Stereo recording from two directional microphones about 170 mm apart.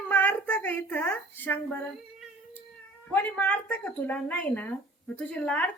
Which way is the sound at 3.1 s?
10° left (ahead or behind).